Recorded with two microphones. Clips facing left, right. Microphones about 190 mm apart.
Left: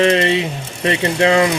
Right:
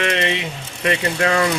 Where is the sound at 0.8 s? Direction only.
25° left (ahead or behind).